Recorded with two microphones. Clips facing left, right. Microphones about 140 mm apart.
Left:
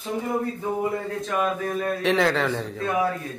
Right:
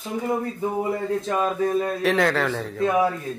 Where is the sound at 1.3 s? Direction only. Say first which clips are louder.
Right 1 dB; 30° right (ahead or behind).